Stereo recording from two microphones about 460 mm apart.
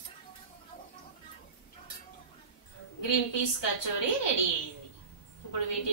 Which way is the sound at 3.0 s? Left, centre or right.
Left.